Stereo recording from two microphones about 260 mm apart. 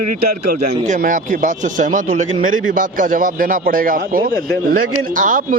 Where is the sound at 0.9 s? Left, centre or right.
Right.